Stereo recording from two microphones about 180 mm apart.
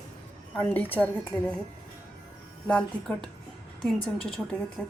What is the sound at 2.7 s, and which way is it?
Speech, 5° left (ahead or behind).